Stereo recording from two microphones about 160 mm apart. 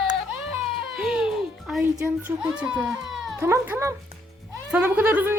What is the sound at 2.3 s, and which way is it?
Speech, 10° right (ahead or behind).